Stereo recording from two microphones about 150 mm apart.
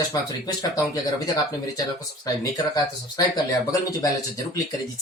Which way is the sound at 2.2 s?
25° left (ahead or behind).